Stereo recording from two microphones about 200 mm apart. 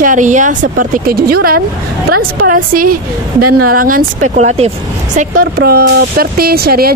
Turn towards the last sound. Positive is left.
turn(degrees=-50)  # may be behind; listen again after turning